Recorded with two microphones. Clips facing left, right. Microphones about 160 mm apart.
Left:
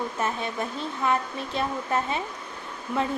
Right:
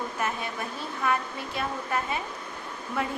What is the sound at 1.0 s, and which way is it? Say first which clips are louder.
Speech: left 2 dB; 25° left (ahead or behind).